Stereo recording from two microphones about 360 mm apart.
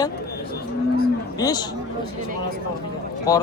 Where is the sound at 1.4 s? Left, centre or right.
Centre.